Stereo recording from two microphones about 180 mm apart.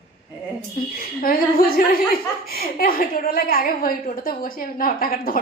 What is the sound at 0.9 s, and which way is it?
A woman's voice, 55° left (ahead or behind).